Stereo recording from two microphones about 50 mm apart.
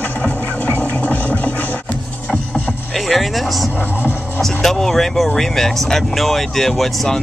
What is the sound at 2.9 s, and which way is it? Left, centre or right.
Music, centre.